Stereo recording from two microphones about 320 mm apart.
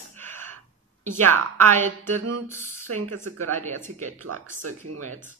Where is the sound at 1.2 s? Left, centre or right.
Right.